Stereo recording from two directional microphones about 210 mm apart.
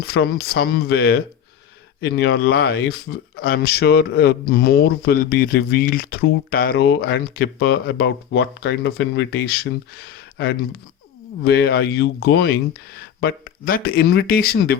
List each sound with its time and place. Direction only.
0.0 s speech: 50° left (ahead or behind)